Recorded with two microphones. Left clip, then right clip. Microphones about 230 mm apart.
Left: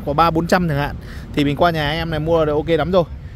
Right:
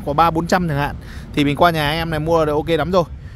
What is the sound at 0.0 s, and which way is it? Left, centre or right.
Speech, centre.